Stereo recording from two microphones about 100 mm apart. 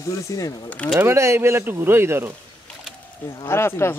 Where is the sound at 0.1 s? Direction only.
35° left (ahead or behind).